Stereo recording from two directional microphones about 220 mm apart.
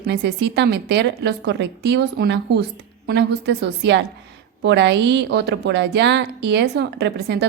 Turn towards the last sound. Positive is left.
turn(degrees=-50)  # may be behind; listen again after turning